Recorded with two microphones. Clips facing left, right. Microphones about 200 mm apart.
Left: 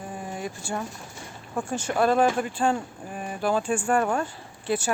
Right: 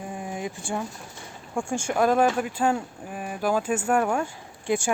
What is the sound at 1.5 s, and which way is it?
Speech, 10° right (ahead or behind).